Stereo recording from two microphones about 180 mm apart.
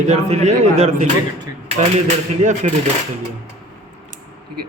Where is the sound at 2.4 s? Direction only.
45° right (ahead or behind).